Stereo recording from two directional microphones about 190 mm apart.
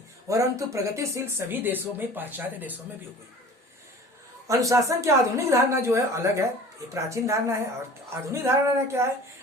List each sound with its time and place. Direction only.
0.3 s speech: 15° right (ahead or behind)
4.4 s speech: 15° right (ahead or behind)